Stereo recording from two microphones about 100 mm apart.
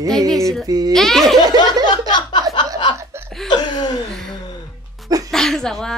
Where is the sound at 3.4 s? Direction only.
45° left (ahead or behind).